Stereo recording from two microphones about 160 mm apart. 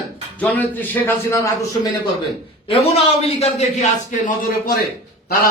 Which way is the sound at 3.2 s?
40° left (ahead or behind).